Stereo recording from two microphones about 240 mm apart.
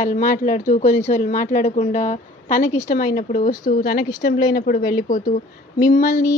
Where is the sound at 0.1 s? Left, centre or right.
Left.